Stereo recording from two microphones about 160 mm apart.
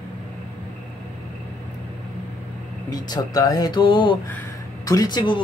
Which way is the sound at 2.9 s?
25° left (ahead or behind).